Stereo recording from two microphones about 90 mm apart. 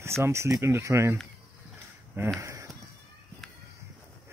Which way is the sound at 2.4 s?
35° right (ahead or behind).